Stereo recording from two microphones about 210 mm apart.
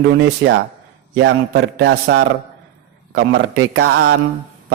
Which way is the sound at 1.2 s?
60° right (ahead or behind).